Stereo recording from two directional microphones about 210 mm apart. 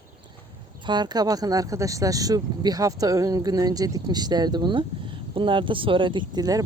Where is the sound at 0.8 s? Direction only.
20° right (ahead or behind).